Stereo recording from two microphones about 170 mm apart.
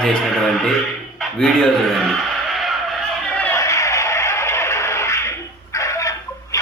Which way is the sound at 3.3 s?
10° left (ahead or behind).